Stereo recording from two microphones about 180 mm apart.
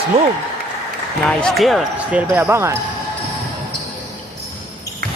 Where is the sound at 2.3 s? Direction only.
15° right (ahead or behind).